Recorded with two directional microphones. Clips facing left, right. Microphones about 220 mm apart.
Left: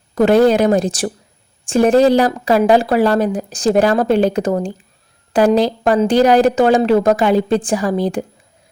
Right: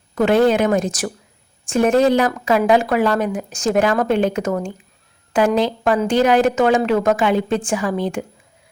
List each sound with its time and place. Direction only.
0.1 s speech: 40° left (ahead or behind)